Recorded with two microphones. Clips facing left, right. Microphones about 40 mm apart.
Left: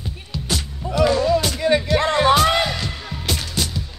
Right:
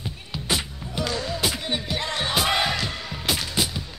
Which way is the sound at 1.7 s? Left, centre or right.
Left.